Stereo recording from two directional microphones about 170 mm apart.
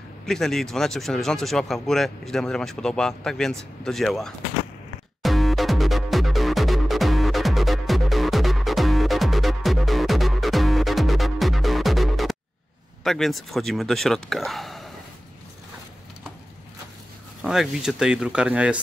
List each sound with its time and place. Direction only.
0.3 s speech: centre (ahead or behind)
5.2 s music: centre (ahead or behind)
13.0 s speech: centre (ahead or behind)
17.4 s speech: centre (ahead or behind)